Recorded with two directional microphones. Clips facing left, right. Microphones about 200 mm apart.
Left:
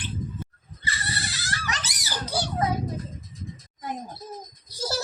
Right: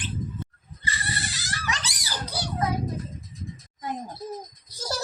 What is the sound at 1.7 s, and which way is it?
Dog, 45° left (ahead or behind).